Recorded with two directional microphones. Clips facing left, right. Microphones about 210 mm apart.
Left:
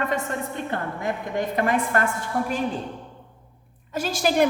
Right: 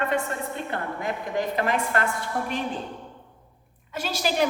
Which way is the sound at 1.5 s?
50° left (ahead or behind).